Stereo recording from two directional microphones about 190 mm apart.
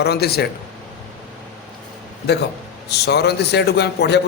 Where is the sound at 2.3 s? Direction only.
60° left (ahead or behind).